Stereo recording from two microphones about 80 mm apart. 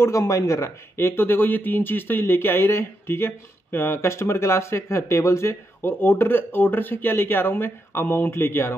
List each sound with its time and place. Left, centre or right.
0.0 s speech: left